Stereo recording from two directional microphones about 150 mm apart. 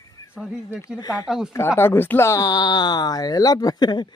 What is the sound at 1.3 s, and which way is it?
Speech, 5° right (ahead or behind).